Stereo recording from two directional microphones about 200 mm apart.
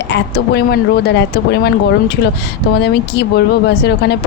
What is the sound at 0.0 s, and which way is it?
A woman's voice, 55° left (ahead or behind).